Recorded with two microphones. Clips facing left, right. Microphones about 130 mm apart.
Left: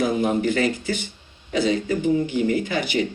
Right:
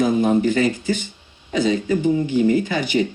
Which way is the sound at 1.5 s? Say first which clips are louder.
Right 2 dB; 25° right (ahead or behind).